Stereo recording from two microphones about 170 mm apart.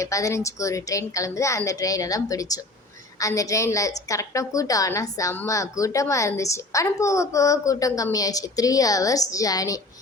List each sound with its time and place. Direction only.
0.0 s a woman's voice: 20° left (ahead or behind)